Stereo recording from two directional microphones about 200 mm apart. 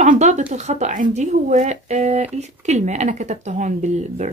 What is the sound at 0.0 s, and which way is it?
Speech, 35° right (ahead or behind).